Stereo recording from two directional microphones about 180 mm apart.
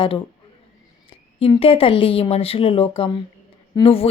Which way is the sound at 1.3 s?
30° left (ahead or behind).